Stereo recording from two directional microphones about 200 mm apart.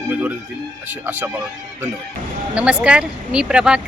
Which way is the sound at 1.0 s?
10° right (ahead or behind).